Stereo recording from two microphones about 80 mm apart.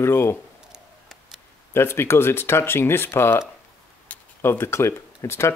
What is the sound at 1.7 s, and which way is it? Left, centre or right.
Speech, left.